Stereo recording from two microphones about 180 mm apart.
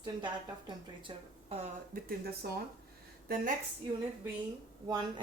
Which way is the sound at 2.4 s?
55° right (ahead or behind).